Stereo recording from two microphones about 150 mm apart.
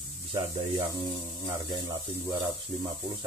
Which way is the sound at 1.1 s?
30° right (ahead or behind).